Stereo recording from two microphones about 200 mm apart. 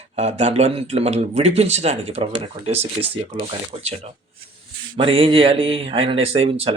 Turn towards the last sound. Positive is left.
turn(degrees=-30)  # may be behind; listen again after turning